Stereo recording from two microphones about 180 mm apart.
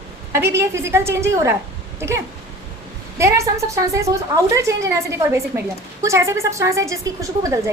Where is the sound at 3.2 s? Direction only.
15° right (ahead or behind).